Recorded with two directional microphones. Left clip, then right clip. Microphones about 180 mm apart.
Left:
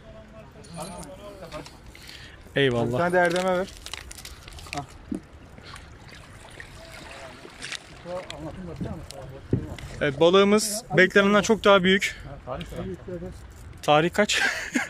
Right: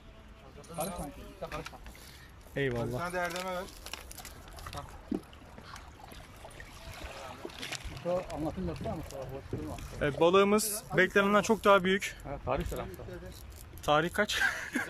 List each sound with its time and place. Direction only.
2.5 s speech: 15° left (ahead or behind)
3.0 s speech: 50° left (ahead or behind)
7.7 s boat: 5° right (ahead or behind)
9.5 s speech: 35° left (ahead or behind)
9.9 s speech: centre (ahead or behind)
12.5 s speech: 10° right (ahead or behind)
13.8 s speech: 5° left (ahead or behind)